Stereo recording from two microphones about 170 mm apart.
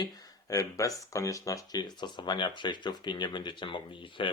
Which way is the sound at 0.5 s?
20° left (ahead or behind).